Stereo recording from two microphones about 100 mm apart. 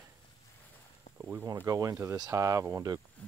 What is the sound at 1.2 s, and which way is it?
Speech, 15° right (ahead or behind).